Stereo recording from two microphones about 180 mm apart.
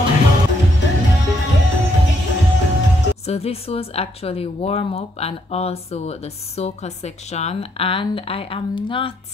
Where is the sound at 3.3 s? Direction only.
35° left (ahead or behind).